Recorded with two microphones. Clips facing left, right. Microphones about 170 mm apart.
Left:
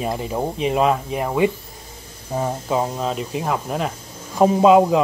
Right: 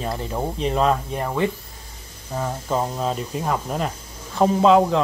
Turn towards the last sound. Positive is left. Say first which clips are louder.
# left 2 dB
turn(degrees=10)  # may be behind; listen again after turning